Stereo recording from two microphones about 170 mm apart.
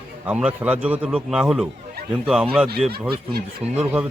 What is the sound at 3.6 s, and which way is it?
Speech, 5° right (ahead or behind).